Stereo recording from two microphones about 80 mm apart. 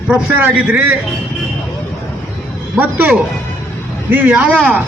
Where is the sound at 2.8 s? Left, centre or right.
Right.